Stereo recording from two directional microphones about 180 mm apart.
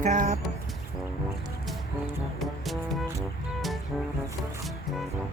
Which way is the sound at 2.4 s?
Centre (ahead or behind).